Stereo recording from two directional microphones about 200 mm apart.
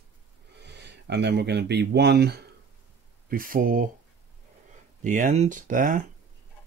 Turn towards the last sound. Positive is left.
turn(degrees=-40)  # may be behind; listen again after turning